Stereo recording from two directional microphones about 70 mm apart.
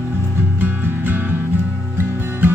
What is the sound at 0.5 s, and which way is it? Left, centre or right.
Music, right.